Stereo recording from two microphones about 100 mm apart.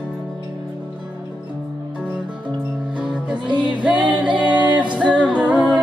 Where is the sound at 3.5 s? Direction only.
50° right (ahead or behind).